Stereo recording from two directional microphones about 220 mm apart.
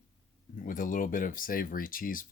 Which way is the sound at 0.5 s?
40° left (ahead or behind).